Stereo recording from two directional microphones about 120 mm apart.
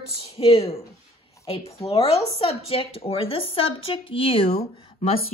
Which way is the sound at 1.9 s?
50° left (ahead or behind).